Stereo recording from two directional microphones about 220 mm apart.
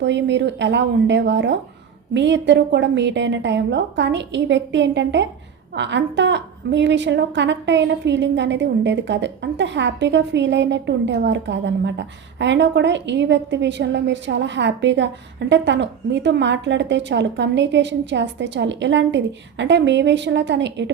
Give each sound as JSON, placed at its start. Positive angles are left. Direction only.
{"t": 0.0, "sound": "a woman's voice", "side_deg": -55}